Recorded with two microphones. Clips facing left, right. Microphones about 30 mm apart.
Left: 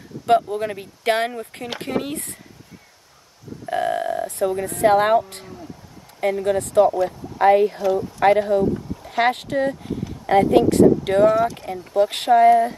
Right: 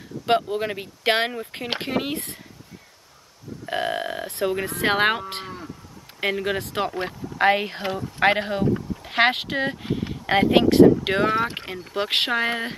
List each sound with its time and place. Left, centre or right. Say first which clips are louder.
0.3 s speech: left 3 dB; right
3.6 s burping: left 4 dB; right
4.8 s speech: left 6 dB; right
5.3 s moo: right 5 dB; right
6.2 s speech: left 4 dB; right